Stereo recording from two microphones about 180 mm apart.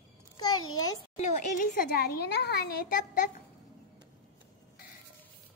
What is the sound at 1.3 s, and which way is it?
A woman's voice, 50° left (ahead or behind).